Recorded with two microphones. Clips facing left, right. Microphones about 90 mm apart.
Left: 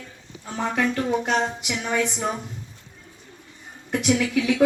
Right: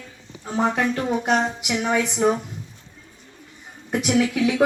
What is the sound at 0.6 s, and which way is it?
A woman's voice, 20° right (ahead or behind).